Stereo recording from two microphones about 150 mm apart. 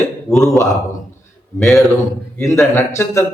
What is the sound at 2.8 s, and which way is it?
Speech, 20° left (ahead or behind).